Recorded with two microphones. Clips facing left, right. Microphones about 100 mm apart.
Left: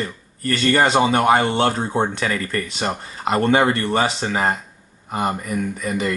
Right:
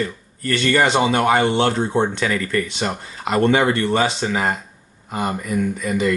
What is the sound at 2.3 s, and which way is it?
Speech, 30° left (ahead or behind).